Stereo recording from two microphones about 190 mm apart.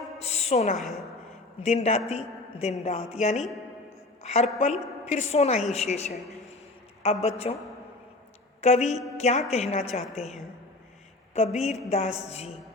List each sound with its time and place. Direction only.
0.2 s a woman's voice: 35° left (ahead or behind)
0.8 s a woman's voice: centre (ahead or behind)
1.6 s a man's voice: 35° left (ahead or behind)
8.6 s a man's voice: 35° left (ahead or behind)
11.3 s a man's voice: 35° left (ahead or behind)